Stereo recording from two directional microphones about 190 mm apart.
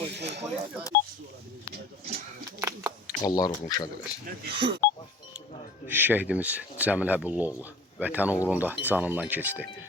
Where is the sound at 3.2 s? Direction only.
20° left (ahead or behind).